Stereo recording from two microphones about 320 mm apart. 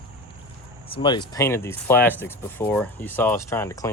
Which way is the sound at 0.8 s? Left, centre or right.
Centre.